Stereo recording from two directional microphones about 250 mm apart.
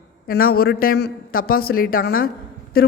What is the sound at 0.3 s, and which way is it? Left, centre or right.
A woman's voice, left.